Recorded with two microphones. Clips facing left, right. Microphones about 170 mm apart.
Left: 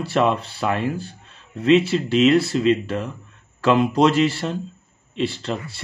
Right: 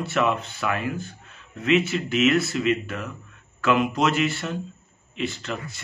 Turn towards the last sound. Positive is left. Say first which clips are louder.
# left 4 dB
turn(degrees=30)  # may be behind; listen again after turning